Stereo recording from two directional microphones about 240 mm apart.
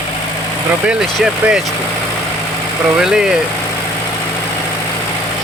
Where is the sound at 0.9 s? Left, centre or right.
Centre.